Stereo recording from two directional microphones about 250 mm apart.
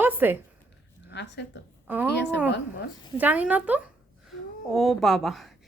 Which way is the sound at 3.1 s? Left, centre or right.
Centre.